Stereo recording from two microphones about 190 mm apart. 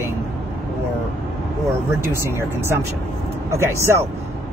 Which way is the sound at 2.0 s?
15° right (ahead or behind).